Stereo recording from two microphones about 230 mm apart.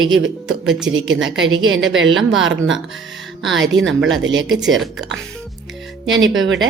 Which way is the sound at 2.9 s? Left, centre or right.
Centre.